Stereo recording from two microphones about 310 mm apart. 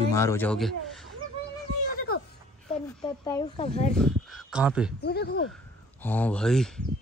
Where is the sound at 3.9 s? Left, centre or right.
Centre.